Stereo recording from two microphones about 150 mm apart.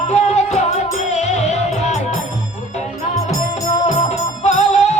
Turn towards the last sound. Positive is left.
turn(degrees=50)  # may be behind; listen again after turning